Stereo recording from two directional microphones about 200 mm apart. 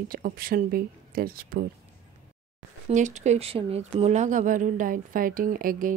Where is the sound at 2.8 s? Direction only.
35° right (ahead or behind).